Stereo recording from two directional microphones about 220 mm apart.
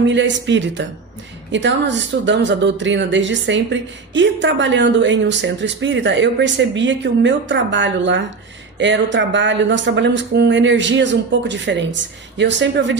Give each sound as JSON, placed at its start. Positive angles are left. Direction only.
{"t": 0.0, "sound": "speech", "side_deg": -55}